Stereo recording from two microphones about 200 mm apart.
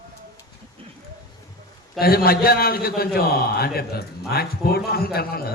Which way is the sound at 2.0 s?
50° left (ahead or behind).